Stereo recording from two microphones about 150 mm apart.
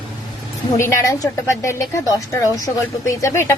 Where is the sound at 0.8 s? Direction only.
20° left (ahead or behind).